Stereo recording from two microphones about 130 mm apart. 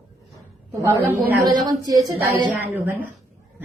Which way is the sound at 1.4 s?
30° right (ahead or behind).